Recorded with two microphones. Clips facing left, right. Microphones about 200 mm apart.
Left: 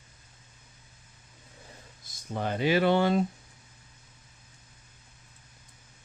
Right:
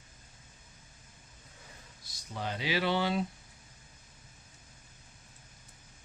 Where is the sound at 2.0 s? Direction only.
50° left (ahead or behind).